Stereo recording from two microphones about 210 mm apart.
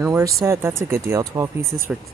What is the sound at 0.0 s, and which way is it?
Speech, 15° right (ahead or behind).